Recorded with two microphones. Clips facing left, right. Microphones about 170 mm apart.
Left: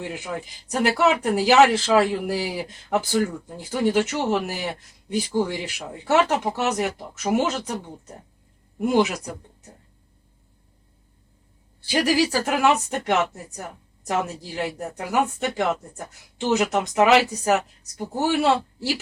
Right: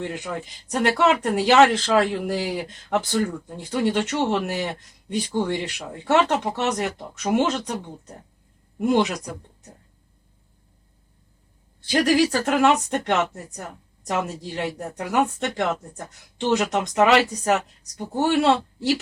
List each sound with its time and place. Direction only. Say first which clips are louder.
0.0 s speech: right 1 dB; 10° left (ahead or behind)
11.9 s speech: right 2 dB; 10° left (ahead or behind)
14.5 s speech: even; 5° left (ahead or behind)